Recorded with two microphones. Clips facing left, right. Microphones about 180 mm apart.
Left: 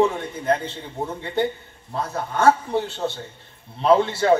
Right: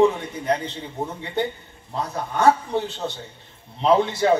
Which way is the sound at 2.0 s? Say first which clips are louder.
Even; 15° right (ahead or behind).